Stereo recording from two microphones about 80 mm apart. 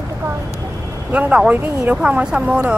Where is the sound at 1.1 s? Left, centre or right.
Centre.